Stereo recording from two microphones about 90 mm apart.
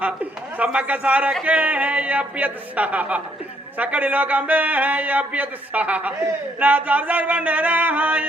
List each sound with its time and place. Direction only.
0.5 s a man's voice: 15° right (ahead or behind)